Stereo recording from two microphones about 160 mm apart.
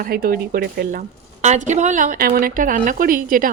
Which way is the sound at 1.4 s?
45° right (ahead or behind).